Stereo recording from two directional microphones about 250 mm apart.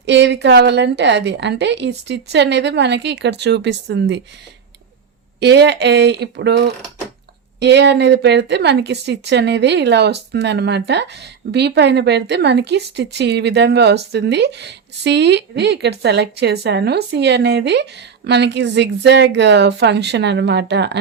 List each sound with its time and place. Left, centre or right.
0.0 s speech: right
5.4 s speech: right